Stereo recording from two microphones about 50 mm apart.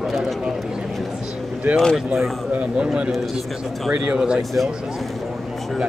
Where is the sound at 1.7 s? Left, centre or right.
Right.